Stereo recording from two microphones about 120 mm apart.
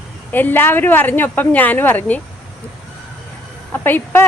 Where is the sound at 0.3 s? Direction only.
15° left (ahead or behind).